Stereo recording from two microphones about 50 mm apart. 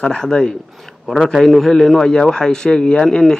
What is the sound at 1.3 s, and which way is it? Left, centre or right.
A man's voice, centre.